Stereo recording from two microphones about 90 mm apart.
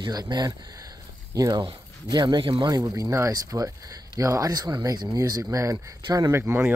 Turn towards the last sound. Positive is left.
turn(degrees=-25)  # may be behind; listen again after turning